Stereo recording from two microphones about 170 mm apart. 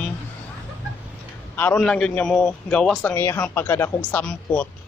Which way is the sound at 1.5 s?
10° left (ahead or behind).